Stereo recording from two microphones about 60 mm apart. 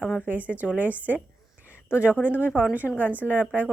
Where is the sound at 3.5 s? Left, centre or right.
Right.